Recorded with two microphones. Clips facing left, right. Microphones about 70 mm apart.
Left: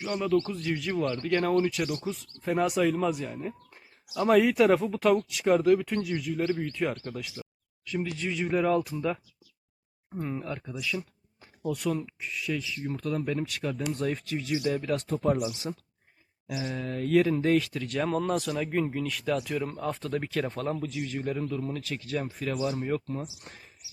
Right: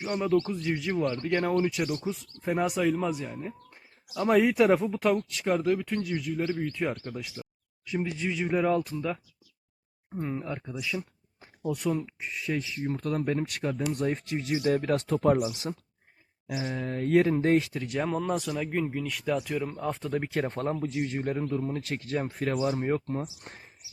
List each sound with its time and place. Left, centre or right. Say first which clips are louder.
0.0 s speech: right 1 dB; centre
7.9 s speech: right 1 dB; centre
10.2 s speech: right 1 dB; centre
11.3 s a sound: even; right
12.0 s speech: even; right
14.9 s speech: right 3 dB; right
15.7 s speech: right 1 dB; centre
16.5 s speech: right 1 dB; right; by 20.3 s centre
20.5 s speech: right 1 dB; right
22.3 s speech: right 4 dB; right